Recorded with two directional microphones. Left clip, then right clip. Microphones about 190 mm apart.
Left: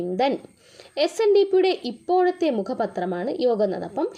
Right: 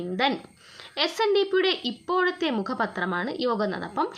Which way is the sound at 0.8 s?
20° left (ahead or behind).